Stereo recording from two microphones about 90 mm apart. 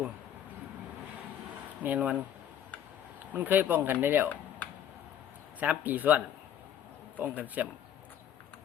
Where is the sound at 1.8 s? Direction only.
15° right (ahead or behind).